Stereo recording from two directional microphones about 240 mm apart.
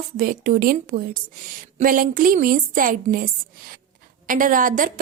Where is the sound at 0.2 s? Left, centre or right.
Right.